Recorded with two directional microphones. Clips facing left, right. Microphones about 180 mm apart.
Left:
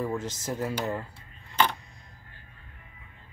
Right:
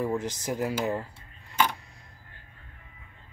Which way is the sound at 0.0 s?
15° right (ahead or behind).